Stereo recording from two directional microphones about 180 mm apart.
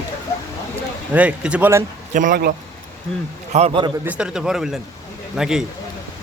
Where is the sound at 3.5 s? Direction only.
30° right (ahead or behind).